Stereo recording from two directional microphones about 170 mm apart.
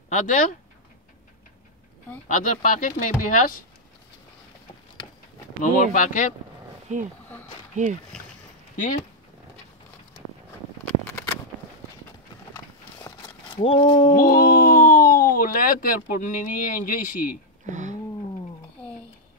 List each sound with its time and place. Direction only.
0.1 s speech: 45° left (ahead or behind)
2.2 s speech: 45° left (ahead or behind)
5.6 s speech: 50° left (ahead or behind)
6.9 s speech: 45° right (ahead or behind)
8.7 s speech: 50° left (ahead or behind)
11.1 s a sound: 5° left (ahead or behind)
13.0 s a sound: 20° left (ahead or behind)
13.6 s speech: 30° left (ahead or behind)
14.1 s speech: 55° left (ahead or behind)
17.6 s a sound: 50° right (ahead or behind)